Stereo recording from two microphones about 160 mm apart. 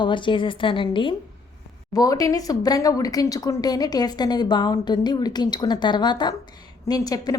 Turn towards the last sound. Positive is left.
turn(degrees=25)  # may be behind; listen again after turning